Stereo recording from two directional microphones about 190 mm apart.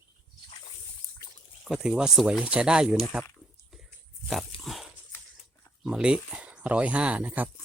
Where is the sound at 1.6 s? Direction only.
5° right (ahead or behind).